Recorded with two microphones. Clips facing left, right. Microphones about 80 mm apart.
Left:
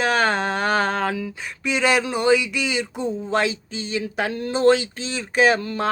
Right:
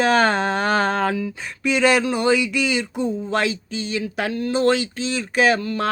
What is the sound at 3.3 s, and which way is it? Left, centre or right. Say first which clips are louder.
Speech: even; left.